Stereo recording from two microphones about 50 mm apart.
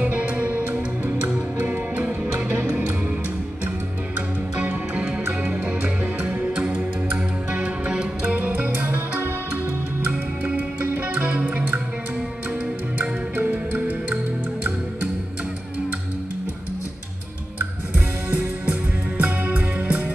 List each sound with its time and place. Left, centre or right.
0.0 s music: right
4.6 s music: right
8.4 s music: right
10.4 s music: right
13.4 s music: right
17.9 s music: right